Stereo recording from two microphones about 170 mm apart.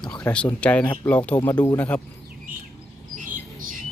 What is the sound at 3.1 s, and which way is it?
Bird, 50° right (ahead or behind).